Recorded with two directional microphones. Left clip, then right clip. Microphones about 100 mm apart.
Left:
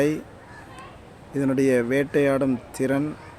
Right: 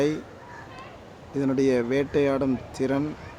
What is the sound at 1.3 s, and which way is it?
Speech, 25° left (ahead or behind).